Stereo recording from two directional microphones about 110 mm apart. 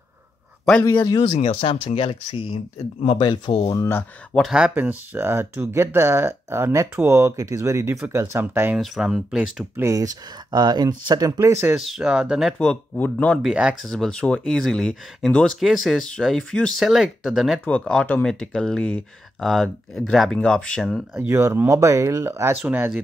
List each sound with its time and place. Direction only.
1.3 s speech: 65° left (ahead or behind)
3.2 s speech: 45° left (ahead or behind)
3.7 s speech: 25° left (ahead or behind)
4.5 s speech: 5° right (ahead or behind)
4.7 s speech: 20° right (ahead or behind)
8.7 s speech: 5° right (ahead or behind)
9.8 s speech: 30° right (ahead or behind)
11.7 s speech: 5° right (ahead or behind)
12.5 s speech: 10° left (ahead or behind)
13.4 s speech: 5° right (ahead or behind)
13.8 s speech: 5° left (ahead or behind)
17.6 s speech: 10° left (ahead or behind)
19.4 s speech: centre (ahead or behind)
21.2 s speech: 25° right (ahead or behind)